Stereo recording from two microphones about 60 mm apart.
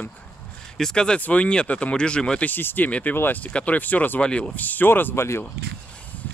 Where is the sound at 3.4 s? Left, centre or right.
Left.